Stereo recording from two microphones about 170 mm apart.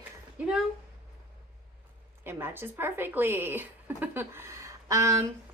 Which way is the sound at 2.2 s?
15° right (ahead or behind).